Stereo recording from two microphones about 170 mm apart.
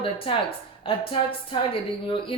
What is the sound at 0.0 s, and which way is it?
Speech, 30° left (ahead or behind).